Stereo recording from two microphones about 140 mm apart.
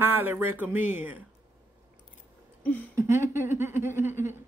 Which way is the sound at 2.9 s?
20° right (ahead or behind).